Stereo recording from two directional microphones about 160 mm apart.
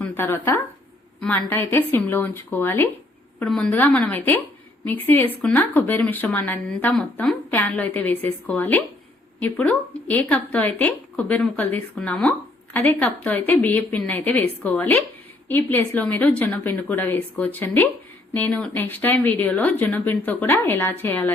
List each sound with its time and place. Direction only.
0.0 s a woman's voice: 10° left (ahead or behind)